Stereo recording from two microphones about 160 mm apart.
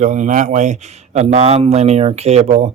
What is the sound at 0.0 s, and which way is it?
Speech, 50° right (ahead or behind).